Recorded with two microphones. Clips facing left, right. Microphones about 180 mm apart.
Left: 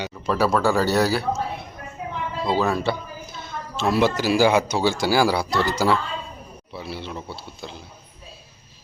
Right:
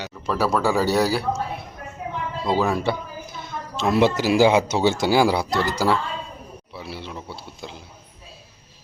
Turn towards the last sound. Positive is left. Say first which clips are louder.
# even
turn(degrees=-15)  # may be behind; listen again after turning